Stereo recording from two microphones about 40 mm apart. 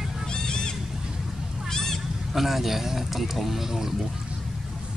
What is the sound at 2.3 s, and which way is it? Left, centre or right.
Speech, centre.